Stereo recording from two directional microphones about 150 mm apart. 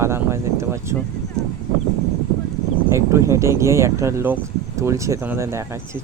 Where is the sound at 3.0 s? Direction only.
20° right (ahead or behind).